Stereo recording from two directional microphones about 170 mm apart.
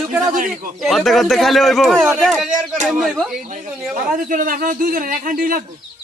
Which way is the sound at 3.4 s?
45° right (ahead or behind).